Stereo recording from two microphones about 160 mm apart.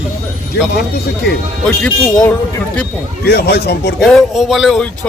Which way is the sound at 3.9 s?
Centre (ahead or behind).